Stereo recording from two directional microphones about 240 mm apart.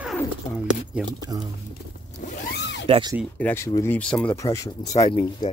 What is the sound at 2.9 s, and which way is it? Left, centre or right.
Speech, centre.